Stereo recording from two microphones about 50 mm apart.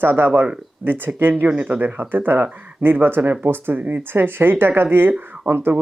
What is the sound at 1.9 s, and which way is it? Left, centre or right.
Speech, right.